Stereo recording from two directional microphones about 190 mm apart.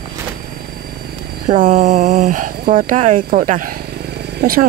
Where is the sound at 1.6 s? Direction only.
45° right (ahead or behind).